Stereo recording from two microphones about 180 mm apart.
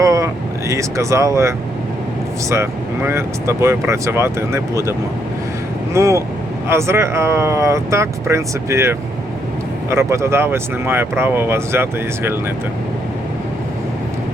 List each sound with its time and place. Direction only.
0.0 s vehicle: 20° right (ahead or behind)
0.7 s speech: 15° right (ahead or behind)